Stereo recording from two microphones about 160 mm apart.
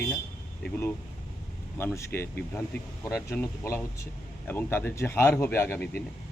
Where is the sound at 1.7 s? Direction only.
15° left (ahead or behind).